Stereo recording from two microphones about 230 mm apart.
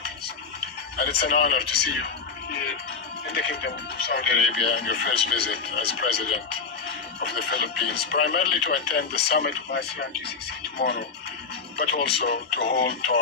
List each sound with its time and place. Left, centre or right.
0.9 s speech: left
3.3 s speech: left